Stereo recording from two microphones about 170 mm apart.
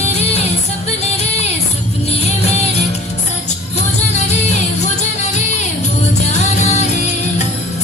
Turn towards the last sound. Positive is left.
turn(degrees=40)  # may be behind; listen again after turning